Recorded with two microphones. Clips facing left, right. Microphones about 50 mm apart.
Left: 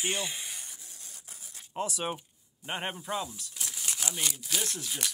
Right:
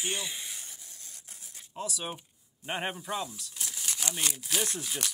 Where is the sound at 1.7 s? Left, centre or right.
Left.